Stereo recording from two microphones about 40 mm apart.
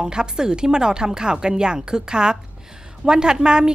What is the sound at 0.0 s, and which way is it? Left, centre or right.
A woman's voice, centre.